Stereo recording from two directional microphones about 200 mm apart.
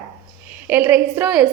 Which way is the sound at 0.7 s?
10° right (ahead or behind).